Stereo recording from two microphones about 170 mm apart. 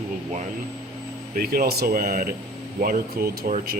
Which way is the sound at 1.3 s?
60° right (ahead or behind).